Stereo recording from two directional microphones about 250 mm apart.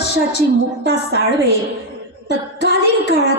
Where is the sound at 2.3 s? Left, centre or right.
Left.